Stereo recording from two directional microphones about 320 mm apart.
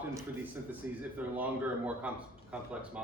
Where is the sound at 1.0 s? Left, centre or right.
Centre.